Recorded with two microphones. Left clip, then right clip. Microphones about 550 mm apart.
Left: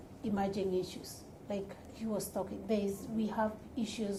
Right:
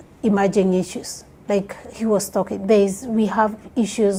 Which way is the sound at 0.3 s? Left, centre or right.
Right.